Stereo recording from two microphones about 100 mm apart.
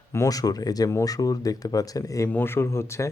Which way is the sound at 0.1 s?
35° left (ahead or behind).